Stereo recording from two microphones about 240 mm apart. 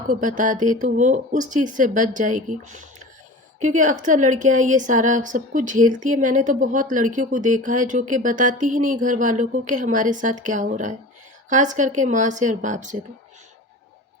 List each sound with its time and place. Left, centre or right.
0.1 s a woman's voice: right